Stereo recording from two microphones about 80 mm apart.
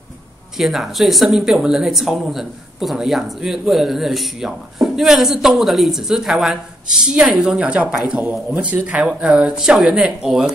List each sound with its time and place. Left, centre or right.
0.6 s speech: centre